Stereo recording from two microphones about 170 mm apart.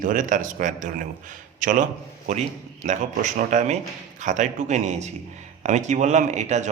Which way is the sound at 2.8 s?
45° right (ahead or behind).